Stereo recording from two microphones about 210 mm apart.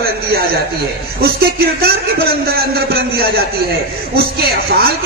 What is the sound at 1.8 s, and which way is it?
A man's voice, 45° right (ahead or behind).